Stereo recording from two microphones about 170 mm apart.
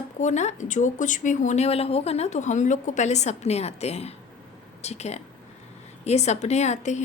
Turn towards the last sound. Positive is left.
turn(degrees=45)  # may be behind; listen again after turning